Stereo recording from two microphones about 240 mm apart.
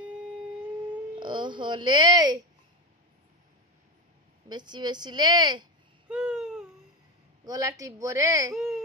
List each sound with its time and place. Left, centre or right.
1.2 s speech: centre
4.5 s a woman's voice: centre
6.0 s a sound: centre
7.4 s a woman's voice: centre
8.5 s speech: centre